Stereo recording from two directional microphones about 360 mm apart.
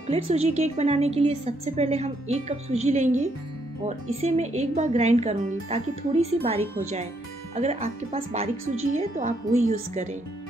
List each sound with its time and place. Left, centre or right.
0.0 s a woman's voice: centre